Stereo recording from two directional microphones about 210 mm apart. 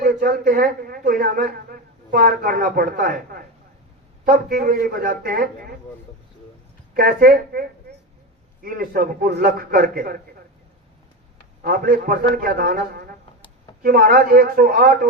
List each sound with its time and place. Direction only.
0.0 s a man's voice: 40° right (ahead or behind)
6.9 s a woman's voice: 45° right (ahead or behind)
11.6 s a man's voice: 40° right (ahead or behind)